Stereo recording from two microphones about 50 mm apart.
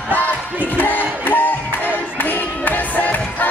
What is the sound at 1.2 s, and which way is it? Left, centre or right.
Music, left.